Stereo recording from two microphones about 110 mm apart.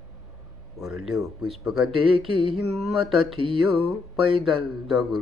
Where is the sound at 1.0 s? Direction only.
Centre (ahead or behind).